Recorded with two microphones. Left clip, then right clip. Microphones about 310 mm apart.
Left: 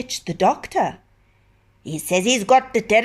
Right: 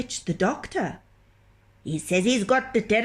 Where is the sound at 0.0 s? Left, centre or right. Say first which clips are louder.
Left 7 dB; centre.